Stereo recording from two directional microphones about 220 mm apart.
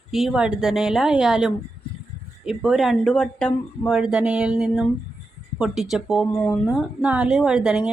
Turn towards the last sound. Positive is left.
turn(degrees=-5)  # may be behind; listen again after turning